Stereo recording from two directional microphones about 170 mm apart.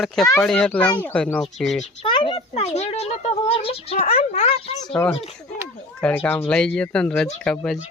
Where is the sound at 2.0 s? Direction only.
30° left (ahead or behind).